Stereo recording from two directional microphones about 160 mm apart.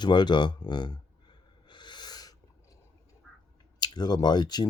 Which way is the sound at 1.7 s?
30° left (ahead or behind).